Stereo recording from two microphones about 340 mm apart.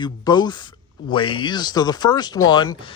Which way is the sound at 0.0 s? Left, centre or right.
Centre.